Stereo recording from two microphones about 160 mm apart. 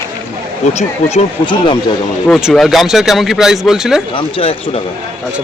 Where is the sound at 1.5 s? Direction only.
30° left (ahead or behind).